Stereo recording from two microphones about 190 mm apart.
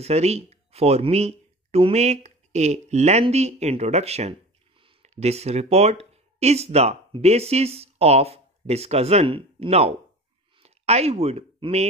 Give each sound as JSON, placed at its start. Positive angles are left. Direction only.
{"t": 0.0, "sound": "speech", "side_deg": -35}